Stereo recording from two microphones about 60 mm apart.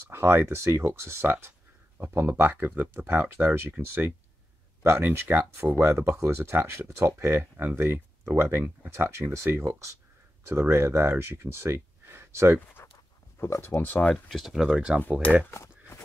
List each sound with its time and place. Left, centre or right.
0.1 s speech: right
5.8 s speech: right
12.8 s dog: left
13.4 s speech: left
13.7 s speech: left
14.3 s speech: centre